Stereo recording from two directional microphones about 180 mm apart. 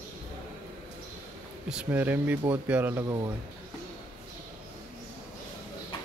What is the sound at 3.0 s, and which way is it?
Speech, 20° right (ahead or behind).